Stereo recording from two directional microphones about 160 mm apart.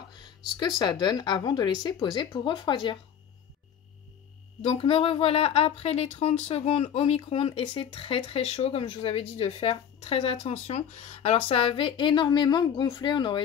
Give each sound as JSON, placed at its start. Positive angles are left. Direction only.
{"t": 0.1, "sound": "a woman's voice", "side_deg": 25}
{"t": 4.6, "sound": "a woman's voice", "side_deg": 35}